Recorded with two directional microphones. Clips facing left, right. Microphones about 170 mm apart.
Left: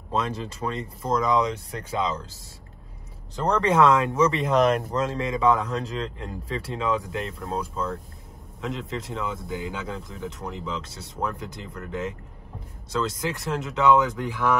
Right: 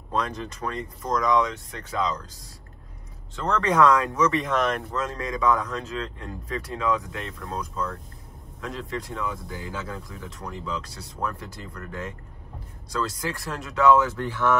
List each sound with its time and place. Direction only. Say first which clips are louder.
0.1 s speech: left 1 dB; 25° left (ahead or behind)
3.3 s speech: left 1 dB; 35° left (ahead or behind); by 14.6 s 15° left (ahead or behind)